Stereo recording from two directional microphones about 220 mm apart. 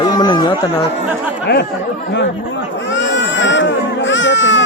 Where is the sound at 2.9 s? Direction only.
55° left (ahead or behind).